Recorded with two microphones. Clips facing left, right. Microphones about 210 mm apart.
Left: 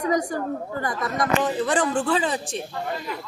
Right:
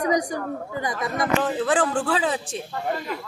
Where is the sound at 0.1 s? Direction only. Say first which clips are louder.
Even; 20° right (ahead or behind).